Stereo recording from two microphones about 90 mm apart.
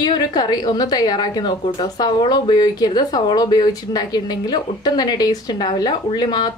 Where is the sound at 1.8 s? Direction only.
55° left (ahead or behind).